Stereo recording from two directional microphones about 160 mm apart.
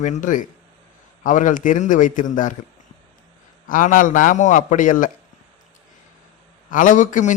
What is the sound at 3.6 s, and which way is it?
A man's voice, 55° left (ahead or behind).